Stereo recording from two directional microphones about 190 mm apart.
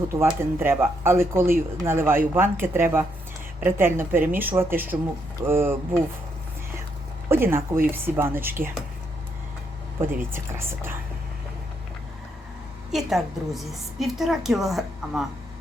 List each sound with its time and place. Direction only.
0.2 s speech: 10° right (ahead or behind)
7.3 s speech: 10° right (ahead or behind)
10.3 s speech: 10° right (ahead or behind)
12.9 s a woman's voice: centre (ahead or behind)